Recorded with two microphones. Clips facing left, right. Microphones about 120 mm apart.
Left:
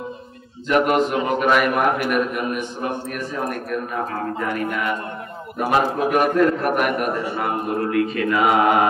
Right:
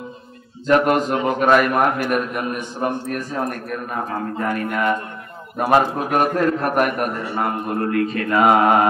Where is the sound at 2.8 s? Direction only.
45° right (ahead or behind).